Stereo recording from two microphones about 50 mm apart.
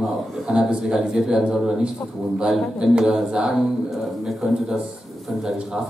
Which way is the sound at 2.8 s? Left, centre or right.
Centre.